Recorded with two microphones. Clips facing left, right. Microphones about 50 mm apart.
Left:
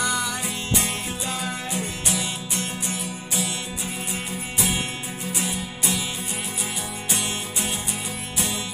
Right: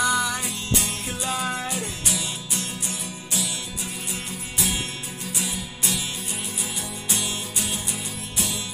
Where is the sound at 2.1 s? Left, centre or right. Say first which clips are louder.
Left 3 dB; left.